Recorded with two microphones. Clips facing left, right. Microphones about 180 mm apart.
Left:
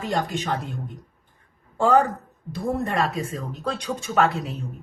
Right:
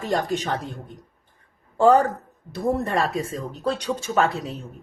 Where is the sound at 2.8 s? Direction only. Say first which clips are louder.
Right 1 dB; 35° right (ahead or behind).